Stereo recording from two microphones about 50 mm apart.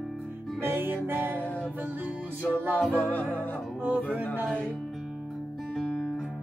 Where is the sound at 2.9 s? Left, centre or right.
Left.